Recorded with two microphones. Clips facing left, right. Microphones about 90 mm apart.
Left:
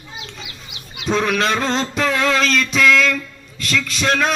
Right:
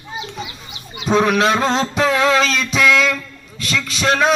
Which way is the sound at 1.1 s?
5° right (ahead or behind).